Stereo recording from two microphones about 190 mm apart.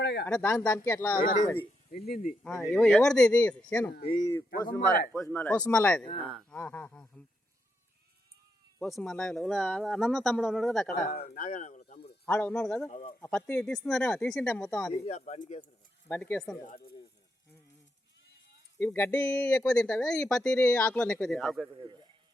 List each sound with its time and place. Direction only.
0.0 s speech: 60° left (ahead or behind)
0.3 s speech: 10° left (ahead or behind)
1.2 s cutlery: 45° left (ahead or behind)
2.4 s speech: 5° left (ahead or behind)
3.9 s cutlery: 55° left (ahead or behind)
5.2 s speech: 10° left (ahead or behind)
8.8 s speech: centre (ahead or behind)
11.3 s speech: 45° left (ahead or behind)
12.2 s speech: 10° left (ahead or behind)
12.9 s cutlery: 40° left (ahead or behind)
13.2 s speech: 5° left (ahead or behind)
15.0 s speech: 40° left (ahead or behind)
16.0 s speech: 10° left (ahead or behind)
18.8 s speech: 10° left (ahead or behind)